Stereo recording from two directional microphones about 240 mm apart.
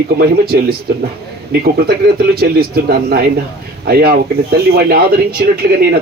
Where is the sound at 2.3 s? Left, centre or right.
Right.